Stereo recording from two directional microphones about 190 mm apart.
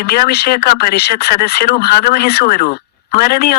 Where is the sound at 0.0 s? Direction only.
55° left (ahead or behind).